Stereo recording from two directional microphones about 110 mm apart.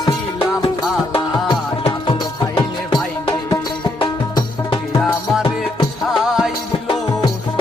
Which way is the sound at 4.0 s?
55° left (ahead or behind).